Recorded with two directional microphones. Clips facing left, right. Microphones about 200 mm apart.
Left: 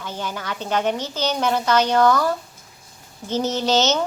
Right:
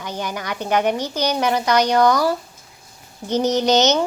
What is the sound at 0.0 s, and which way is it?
Speech, 15° right (ahead or behind).